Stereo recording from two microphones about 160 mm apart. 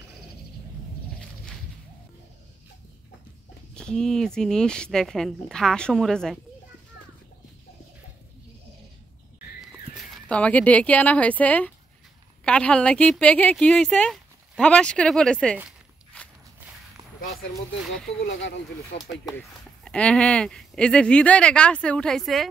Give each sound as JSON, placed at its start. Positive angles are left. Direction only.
{"t": 3.7, "sound": "speech", "side_deg": 5}
{"t": 9.6, "sound": "speech", "side_deg": 0}
{"t": 18.9, "sound": "speech", "side_deg": 40}
{"t": 19.8, "sound": "speech", "side_deg": 5}